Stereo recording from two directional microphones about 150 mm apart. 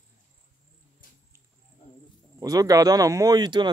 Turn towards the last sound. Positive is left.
turn(degrees=-30)  # may be behind; listen again after turning